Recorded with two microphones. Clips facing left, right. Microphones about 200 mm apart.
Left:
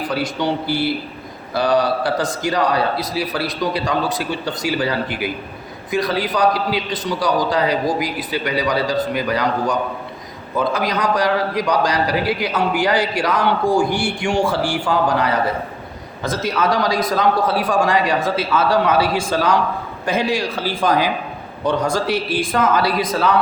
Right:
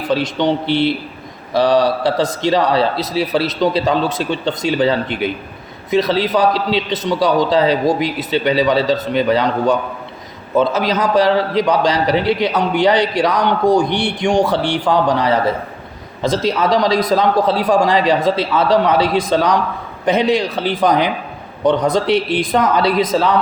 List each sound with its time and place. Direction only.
0.1 s a man's voice: 20° right (ahead or behind)
16.2 s a man's voice: 20° right (ahead or behind)